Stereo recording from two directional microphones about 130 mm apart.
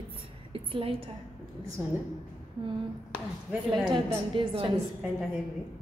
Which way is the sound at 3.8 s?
35° right (ahead or behind).